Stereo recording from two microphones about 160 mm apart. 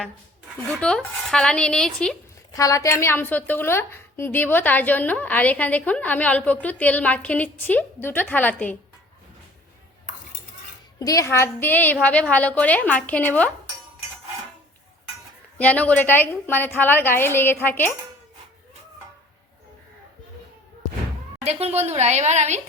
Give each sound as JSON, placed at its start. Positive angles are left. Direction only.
{"t": 0.7, "sound": "a woman's voice", "side_deg": 5}
{"t": 2.5, "sound": "a woman's voice", "side_deg": 20}
{"t": 11.0, "sound": "a woman's voice", "side_deg": 20}
{"t": 15.5, "sound": "a woman's voice", "side_deg": 10}
{"t": 21.4, "sound": "a woman's voice", "side_deg": -40}